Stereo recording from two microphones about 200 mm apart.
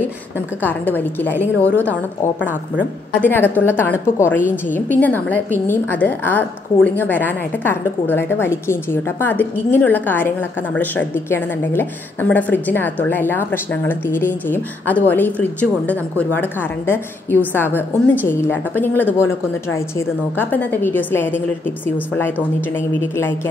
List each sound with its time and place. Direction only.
0.6 s a woman's voice: 10° left (ahead or behind)
3.2 s a woman's voice: 10° left (ahead or behind)